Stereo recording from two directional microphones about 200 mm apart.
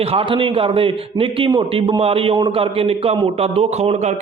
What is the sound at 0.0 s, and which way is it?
A man's voice, 30° right (ahead or behind).